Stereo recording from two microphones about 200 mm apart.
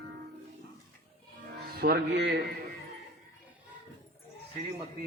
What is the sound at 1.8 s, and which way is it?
Speech, 55° right (ahead or behind).